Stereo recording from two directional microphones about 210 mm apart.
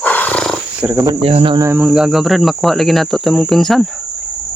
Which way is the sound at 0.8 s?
15° right (ahead or behind).